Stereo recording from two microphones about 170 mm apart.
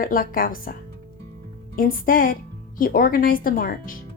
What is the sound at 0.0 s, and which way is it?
Speech, 55° left (ahead or behind).